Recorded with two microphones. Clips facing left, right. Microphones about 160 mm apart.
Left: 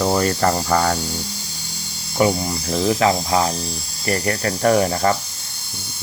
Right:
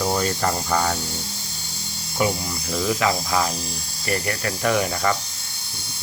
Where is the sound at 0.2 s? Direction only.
50° left (ahead or behind).